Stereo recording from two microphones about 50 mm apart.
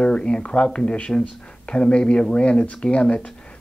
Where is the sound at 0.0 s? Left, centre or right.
Centre.